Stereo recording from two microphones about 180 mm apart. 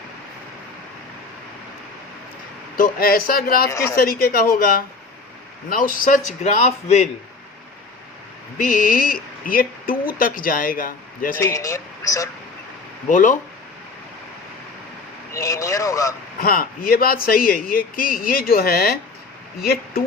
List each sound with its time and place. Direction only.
2.7 s a man's voice: 55° left (ahead or behind)
3.7 s speech: 15° left (ahead or behind)
3.9 s a man's voice: 60° left (ahead or behind); by 7.1 s 35° left (ahead or behind)
8.5 s speech: 50° left (ahead or behind)
11.3 s speech: 15° left (ahead or behind)
13.1 s speech: 45° left (ahead or behind)
15.3 s speech: 15° left (ahead or behind)
16.4 s a man's voice: 55° left (ahead or behind)